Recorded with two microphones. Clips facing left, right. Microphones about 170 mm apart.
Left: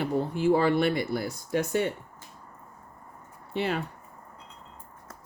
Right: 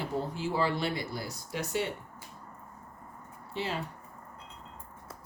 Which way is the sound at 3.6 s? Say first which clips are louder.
Left 6 dB; 60° left (ahead or behind).